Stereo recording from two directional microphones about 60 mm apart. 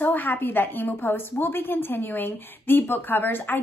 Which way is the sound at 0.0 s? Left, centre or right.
Left.